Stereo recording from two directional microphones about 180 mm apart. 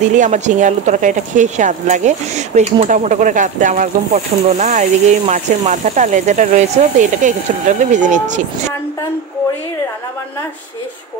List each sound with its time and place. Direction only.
0.1 s speech: 45° right (ahead or behind)